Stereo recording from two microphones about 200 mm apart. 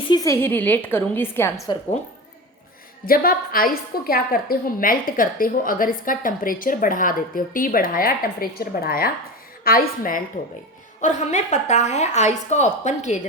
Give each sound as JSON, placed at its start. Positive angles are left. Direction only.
{"t": 0.1, "sound": "a woman's voice", "side_deg": 15}
{"t": 1.7, "sound": "speech", "side_deg": 20}
{"t": 3.1, "sound": "a woman's voice", "side_deg": 45}